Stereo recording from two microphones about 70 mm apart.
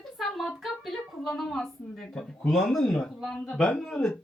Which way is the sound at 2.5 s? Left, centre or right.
Centre.